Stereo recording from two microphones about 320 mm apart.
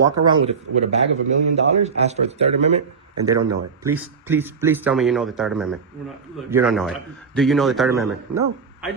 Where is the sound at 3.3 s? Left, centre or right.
Right.